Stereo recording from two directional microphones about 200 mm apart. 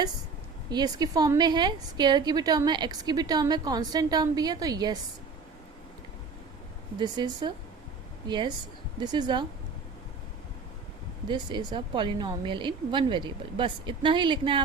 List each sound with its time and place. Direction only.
0.7 s a woman's voice: 20° right (ahead or behind)
7.0 s a woman's voice: 20° right (ahead or behind)
11.3 s a woman's voice: 20° right (ahead or behind)